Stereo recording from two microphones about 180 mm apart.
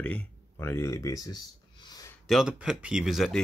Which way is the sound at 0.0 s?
10° left (ahead or behind).